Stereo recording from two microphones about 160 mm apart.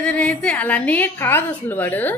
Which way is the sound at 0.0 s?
10° left (ahead or behind).